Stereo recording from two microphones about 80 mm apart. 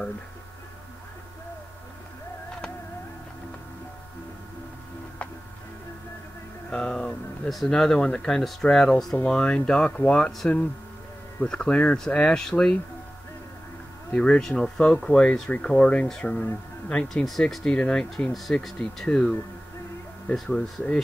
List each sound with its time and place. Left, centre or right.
6.7 s speech: centre
11.4 s speech: centre
14.1 s speech: centre
20.3 s speech: centre